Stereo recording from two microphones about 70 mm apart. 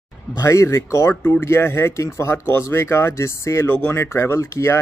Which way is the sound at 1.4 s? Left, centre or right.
Left.